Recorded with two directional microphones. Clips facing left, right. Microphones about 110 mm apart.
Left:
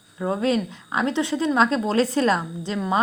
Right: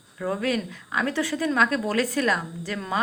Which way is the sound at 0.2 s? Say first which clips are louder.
Left 4 dB; 25° left (ahead or behind).